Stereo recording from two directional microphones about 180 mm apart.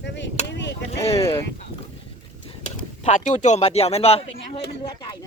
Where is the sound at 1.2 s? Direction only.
15° left (ahead or behind).